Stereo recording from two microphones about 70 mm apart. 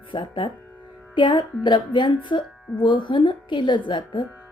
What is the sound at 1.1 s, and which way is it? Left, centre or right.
Speech, left.